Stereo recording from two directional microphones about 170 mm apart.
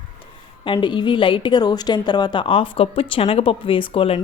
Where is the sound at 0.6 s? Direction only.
30° left (ahead or behind).